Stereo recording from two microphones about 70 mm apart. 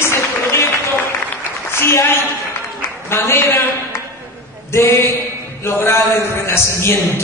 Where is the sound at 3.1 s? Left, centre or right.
Left.